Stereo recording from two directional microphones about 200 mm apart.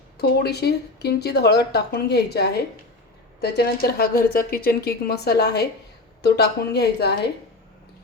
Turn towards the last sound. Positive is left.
turn(degrees=55)  # may be behind; listen again after turning